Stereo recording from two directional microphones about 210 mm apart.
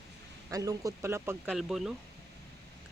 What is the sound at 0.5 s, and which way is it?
Speech, 15° right (ahead or behind).